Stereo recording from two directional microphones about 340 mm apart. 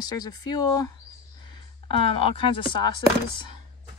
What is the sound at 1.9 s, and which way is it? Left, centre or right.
Speech, centre.